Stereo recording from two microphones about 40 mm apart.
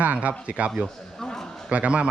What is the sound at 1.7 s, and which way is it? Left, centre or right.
Speech, right.